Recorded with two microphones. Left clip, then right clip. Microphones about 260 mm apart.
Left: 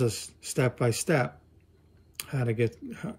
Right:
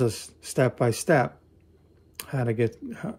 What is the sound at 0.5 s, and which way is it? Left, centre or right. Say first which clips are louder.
Speech: right 4 dB; centre.